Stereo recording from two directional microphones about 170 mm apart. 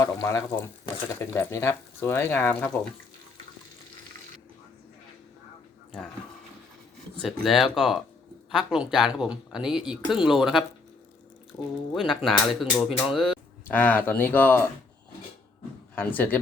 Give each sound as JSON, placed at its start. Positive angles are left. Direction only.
{"t": 0.0, "sound": "speech", "side_deg": 15}
{"t": 7.2, "sound": "speech", "side_deg": 0}
{"t": 11.9, "sound": "speech", "side_deg": 0}
{"t": 13.7, "sound": "speech", "side_deg": 10}
{"t": 16.0, "sound": "speech", "side_deg": 10}